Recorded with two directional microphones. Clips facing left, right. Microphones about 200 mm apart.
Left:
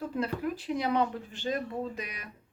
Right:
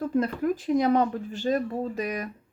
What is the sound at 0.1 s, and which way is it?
Speech, 45° right (ahead or behind).